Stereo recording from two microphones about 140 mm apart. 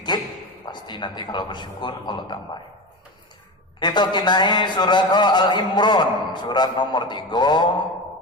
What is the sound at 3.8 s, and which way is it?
Speech, 30° left (ahead or behind).